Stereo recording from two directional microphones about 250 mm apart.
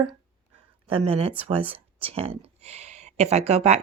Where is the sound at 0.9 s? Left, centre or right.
Right.